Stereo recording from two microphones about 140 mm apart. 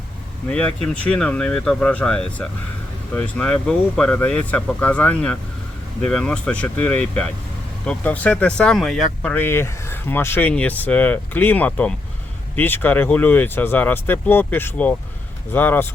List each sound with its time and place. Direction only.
0.5 s speech: 5° left (ahead or behind)